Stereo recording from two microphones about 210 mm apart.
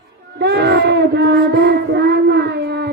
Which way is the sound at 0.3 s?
55° right (ahead or behind).